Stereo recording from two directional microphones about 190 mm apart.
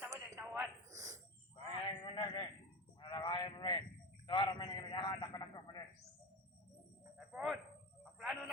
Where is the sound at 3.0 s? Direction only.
25° left (ahead or behind).